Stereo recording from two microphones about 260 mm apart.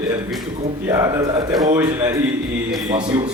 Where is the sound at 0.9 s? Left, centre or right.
Centre.